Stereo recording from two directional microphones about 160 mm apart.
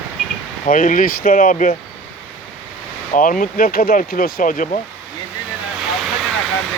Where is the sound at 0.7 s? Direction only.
55° left (ahead or behind).